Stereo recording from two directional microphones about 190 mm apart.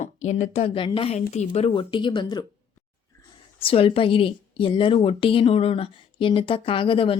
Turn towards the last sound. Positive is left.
turn(degrees=30)  # may be behind; listen again after turning